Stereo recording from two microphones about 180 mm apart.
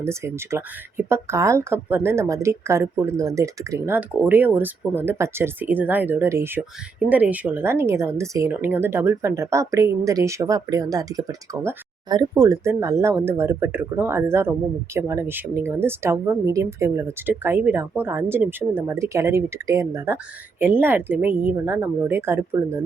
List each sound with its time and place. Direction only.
0.0 s a woman's voice: 15° right (ahead or behind)